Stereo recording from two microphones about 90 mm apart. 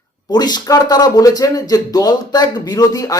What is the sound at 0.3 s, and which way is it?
Speech, 50° left (ahead or behind).